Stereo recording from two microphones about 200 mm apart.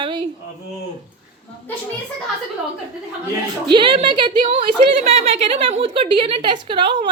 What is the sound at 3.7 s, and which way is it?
A woman's voice, 25° right (ahead or behind).